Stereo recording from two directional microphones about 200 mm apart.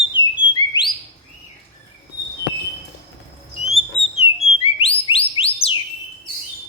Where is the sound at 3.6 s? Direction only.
30° left (ahead or behind).